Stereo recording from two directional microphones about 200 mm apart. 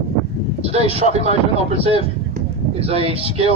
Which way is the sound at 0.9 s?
35° right (ahead or behind).